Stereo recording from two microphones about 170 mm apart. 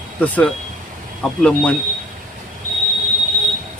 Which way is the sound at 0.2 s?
10° left (ahead or behind).